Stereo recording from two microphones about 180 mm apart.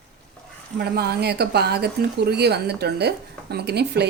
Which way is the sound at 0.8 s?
60° right (ahead or behind).